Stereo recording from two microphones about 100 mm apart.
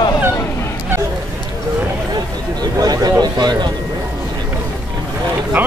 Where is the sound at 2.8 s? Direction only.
40° right (ahead or behind).